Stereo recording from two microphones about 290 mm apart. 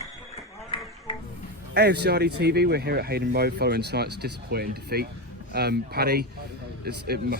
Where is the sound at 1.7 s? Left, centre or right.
Right.